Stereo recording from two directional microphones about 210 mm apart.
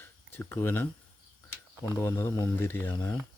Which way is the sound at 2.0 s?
15° left (ahead or behind).